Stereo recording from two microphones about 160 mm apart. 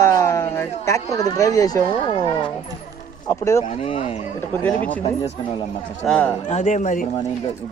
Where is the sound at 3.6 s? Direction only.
45° left (ahead or behind).